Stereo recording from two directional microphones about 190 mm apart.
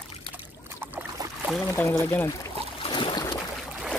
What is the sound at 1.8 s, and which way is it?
Speech, 15° left (ahead or behind).